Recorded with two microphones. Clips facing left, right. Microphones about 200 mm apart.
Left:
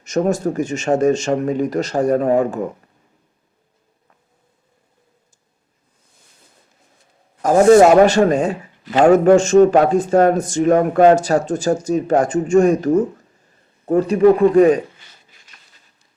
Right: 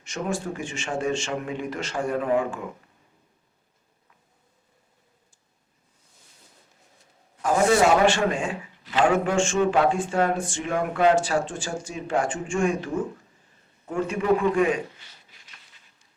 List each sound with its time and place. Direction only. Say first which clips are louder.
0.0 s a man's voice: left 11 dB; 40° left (ahead or behind)
7.4 s a man's voice: left 10 dB; 45° left (ahead or behind)
13.8 s a sound: left 12 dB; 35° left (ahead or behind)